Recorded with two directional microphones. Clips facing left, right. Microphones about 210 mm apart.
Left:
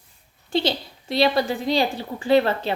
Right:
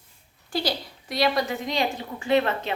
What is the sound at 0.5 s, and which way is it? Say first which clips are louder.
A woman's voice: left 4 dB; 25° left (ahead or behind).